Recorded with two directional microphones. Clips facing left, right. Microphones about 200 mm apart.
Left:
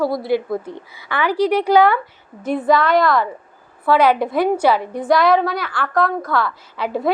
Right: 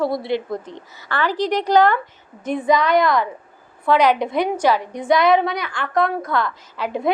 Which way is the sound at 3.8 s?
5° left (ahead or behind).